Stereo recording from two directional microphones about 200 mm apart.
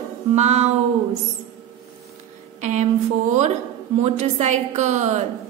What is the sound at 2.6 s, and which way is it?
Speech, 35° right (ahead or behind).